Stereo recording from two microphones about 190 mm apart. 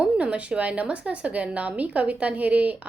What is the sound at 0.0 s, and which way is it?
A woman's voice, 5° right (ahead or behind).